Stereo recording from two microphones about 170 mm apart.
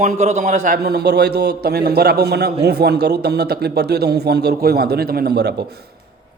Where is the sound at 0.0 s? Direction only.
45° right (ahead or behind).